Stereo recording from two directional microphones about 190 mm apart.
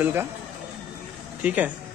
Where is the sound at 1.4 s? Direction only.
5° right (ahead or behind).